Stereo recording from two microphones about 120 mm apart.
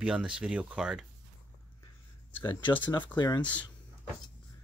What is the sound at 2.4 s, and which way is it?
Speech, 40° left (ahead or behind).